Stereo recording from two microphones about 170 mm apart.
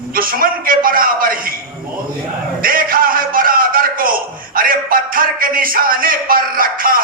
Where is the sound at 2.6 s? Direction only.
55° right (ahead or behind).